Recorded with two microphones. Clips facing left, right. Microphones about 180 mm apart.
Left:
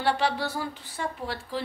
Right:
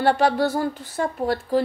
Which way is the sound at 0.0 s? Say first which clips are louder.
Right 7 dB; 45° right (ahead or behind).